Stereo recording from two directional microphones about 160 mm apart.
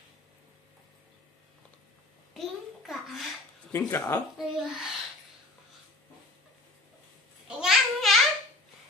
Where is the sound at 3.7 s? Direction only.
15° left (ahead or behind).